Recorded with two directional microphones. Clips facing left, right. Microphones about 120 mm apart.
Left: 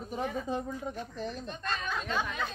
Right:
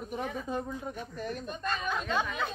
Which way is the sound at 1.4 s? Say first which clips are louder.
Right 2 dB; 5° right (ahead or behind).